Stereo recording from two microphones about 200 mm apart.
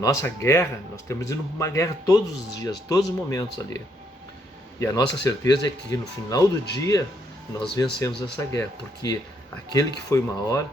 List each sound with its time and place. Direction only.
0.0 s speech: 15° left (ahead or behind)
4.8 s speech: 15° left (ahead or behind)
8.0 s speech: 15° left (ahead or behind)